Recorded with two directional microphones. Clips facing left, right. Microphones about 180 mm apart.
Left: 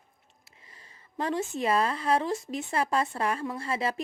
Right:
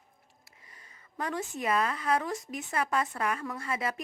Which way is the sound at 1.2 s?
25° left (ahead or behind).